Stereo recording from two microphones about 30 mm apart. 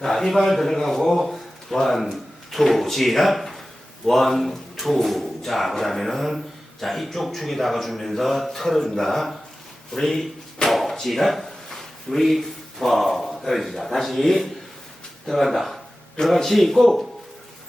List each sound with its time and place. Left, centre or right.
0.0 s a man's voice: centre
10.7 s drawer open or close: centre
11.1 s a man's voice: centre
11.4 s a sound: centre
12.3 s a man's voice: centre